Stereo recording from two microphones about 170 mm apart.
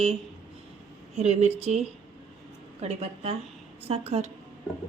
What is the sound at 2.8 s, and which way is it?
A woman's voice, 40° right (ahead or behind).